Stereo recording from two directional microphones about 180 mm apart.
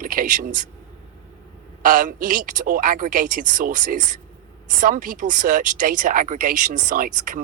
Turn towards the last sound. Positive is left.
turn(degrees=-50)  # may be behind; listen again after turning